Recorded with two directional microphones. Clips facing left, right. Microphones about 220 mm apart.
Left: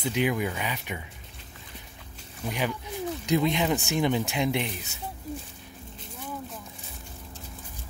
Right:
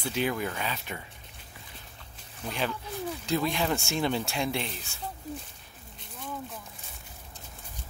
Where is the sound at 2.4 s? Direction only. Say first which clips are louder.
Left 2 dB; 15° left (ahead or behind).